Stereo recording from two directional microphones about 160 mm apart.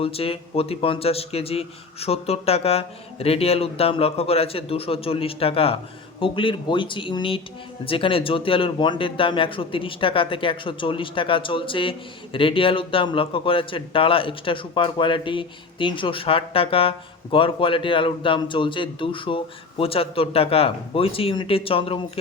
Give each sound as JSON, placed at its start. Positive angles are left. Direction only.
{"t": 0.0, "sound": "speech", "side_deg": 35}